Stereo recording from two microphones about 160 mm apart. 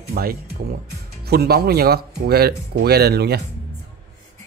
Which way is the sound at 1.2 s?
90° right.